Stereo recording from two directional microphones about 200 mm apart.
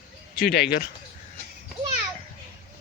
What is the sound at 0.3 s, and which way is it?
Speech, 55° left (ahead or behind).